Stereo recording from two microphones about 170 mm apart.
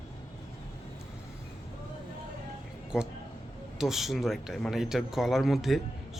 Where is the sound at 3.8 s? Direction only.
Centre (ahead or behind).